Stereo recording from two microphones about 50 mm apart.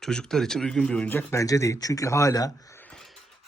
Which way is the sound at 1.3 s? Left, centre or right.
Left.